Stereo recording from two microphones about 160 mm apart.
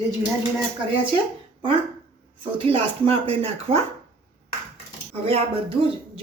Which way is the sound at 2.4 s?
35° right (ahead or behind).